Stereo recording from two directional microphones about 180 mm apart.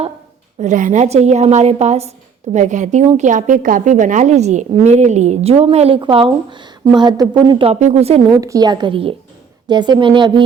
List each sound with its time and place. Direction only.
0.6 s a woman's voice: 45° right (ahead or behind); by 7.7 s 25° right (ahead or behind)
7.7 s a woman's voice: 40° right (ahead or behind)
8.3 s a woman's voice: 20° right (ahead or behind)